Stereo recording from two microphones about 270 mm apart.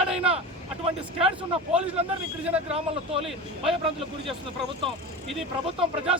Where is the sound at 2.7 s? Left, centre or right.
Right.